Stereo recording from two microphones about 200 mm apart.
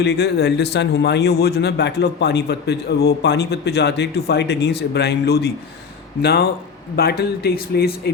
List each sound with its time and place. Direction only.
0.0 s speech: 55° left (ahead or behind)